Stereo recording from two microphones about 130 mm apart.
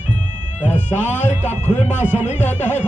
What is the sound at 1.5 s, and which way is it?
Speech, 60° left (ahead or behind).